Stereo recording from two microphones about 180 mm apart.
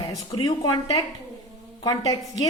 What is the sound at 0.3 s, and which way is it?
A woman's voice, 20° left (ahead or behind).